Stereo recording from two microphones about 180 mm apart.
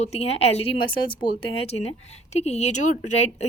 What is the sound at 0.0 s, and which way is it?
A woman's voice, 35° left (ahead or behind).